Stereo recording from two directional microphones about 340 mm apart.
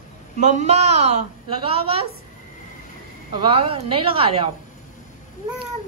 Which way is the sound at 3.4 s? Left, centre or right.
Centre.